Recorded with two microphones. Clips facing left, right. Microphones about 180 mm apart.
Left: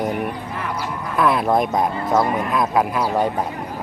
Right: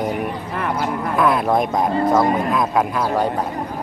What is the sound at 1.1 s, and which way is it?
Speech, centre (ahead or behind).